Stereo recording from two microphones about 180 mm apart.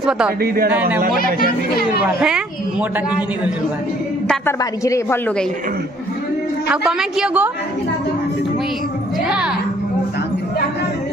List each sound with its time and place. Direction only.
0.7 s a woman's voice: 10° right (ahead or behind)
2.0 s a woman's voice: 5° right (ahead or behind)
4.5 s a man's voice: 15° left (ahead or behind)
6.7 s a woman's voice: 5° right (ahead or behind)